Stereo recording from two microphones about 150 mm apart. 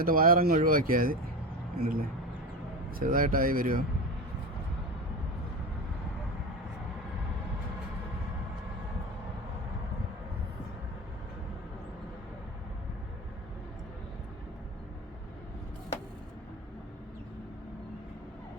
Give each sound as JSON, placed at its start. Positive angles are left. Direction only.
{"t": 0.0, "sound": "speech", "side_deg": -70}